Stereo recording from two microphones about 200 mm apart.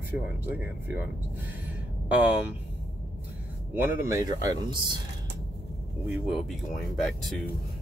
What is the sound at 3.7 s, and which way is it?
Speech, 10° right (ahead or behind).